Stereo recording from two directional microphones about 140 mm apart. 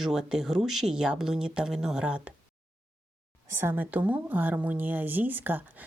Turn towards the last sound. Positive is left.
turn(degrees=-15)  # may be behind; listen again after turning